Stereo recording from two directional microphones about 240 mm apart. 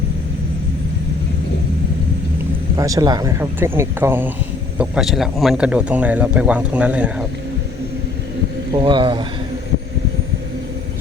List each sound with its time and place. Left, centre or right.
2.7 s speech: centre
8.7 s speech: centre